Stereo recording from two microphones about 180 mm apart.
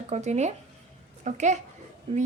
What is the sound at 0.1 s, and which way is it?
A woman's voice, 40° right (ahead or behind).